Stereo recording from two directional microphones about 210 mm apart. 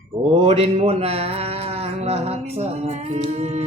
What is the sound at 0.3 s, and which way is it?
Speech, 30° right (ahead or behind).